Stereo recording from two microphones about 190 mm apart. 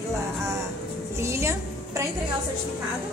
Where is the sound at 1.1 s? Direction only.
15° right (ahead or behind).